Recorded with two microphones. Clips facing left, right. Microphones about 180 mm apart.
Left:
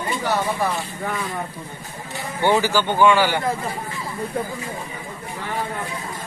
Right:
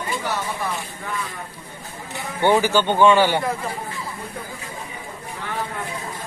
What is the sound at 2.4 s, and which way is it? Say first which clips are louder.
Speech: right 1 dB; 15° right (ahead or behind).